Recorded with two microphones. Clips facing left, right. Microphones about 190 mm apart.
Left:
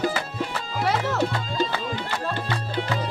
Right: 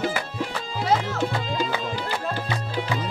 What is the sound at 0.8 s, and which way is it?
Music, 65° left (ahead or behind).